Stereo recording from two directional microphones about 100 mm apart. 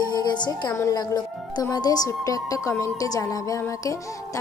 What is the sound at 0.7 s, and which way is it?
Speech, 30° left (ahead or behind).